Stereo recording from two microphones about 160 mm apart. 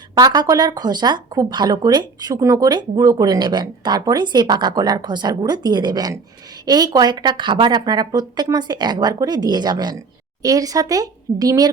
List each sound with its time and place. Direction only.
0.1 s speech: 25° right (ahead or behind)